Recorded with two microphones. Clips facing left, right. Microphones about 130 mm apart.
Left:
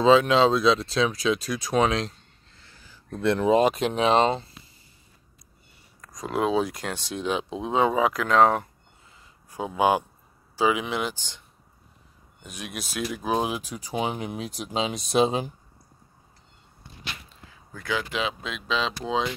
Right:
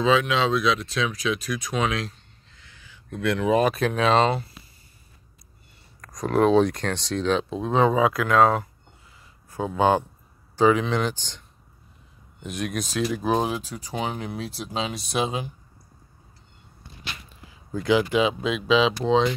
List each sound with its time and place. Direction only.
0.0 s speech: 30° left (ahead or behind)
2.6 s speech: 40° left (ahead or behind); by 4.5 s 20° left (ahead or behind)
6.1 s speech: 5° left (ahead or behind); by 8.5 s 20° left (ahead or behind)
9.5 s speech: 15° left (ahead or behind)
13.2 s speech: 10° left (ahead or behind); by 15.5 s 30° left (ahead or behind)
17.5 s a sound: 15° right (ahead or behind)
18.1 s speech: 5° right (ahead or behind)